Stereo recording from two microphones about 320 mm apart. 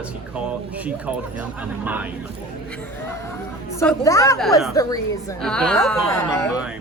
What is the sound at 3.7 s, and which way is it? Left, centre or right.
A woman's voice, centre.